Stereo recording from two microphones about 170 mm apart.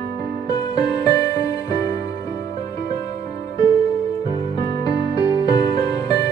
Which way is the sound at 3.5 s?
25° left (ahead or behind).